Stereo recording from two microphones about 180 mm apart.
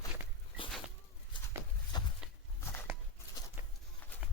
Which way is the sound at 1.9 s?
25° left (ahead or behind).